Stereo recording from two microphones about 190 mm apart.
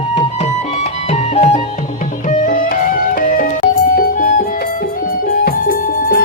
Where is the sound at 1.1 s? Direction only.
30° left (ahead or behind).